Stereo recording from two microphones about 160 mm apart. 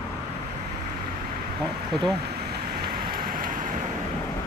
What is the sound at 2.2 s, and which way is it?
Vehicle, 75° right (ahead or behind).